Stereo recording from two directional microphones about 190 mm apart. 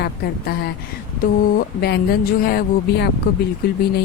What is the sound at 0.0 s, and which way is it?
A woman's voice, 55° left (ahead or behind).